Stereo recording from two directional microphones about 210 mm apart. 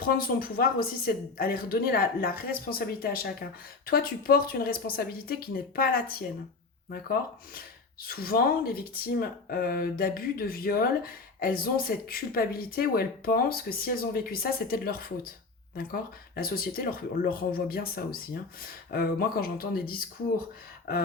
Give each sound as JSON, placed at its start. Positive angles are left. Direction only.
{"t": 0.0, "sound": "speech", "side_deg": 45}